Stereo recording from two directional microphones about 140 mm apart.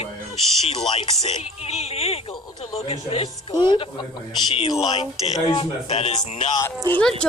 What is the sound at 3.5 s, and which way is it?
Speech, 35° left (ahead or behind).